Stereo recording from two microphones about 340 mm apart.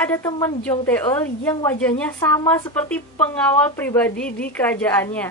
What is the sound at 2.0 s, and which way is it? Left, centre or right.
A woman's voice, centre.